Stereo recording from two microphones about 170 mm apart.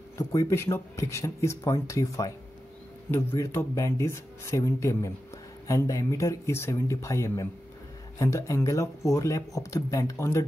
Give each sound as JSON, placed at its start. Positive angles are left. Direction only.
{"t": 0.2, "sound": "speech", "side_deg": 20}